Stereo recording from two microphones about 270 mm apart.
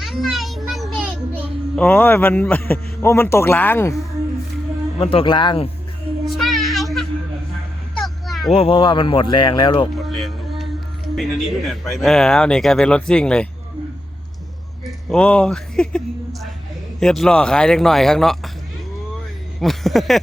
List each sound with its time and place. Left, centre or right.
0.0 s children playing: centre
1.7 s a man's voice: centre
4.9 s speech: left
6.2 s a sound: centre
8.5 s a man's voice: centre
10.2 s music: centre
11.1 s speech: centre
14.8 s speech: centre
19.5 s speech: centre